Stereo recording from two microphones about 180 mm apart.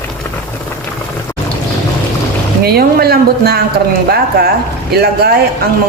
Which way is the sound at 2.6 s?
60° right (ahead or behind).